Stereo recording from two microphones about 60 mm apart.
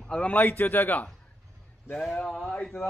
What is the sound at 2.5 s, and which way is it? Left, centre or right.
Speech, centre.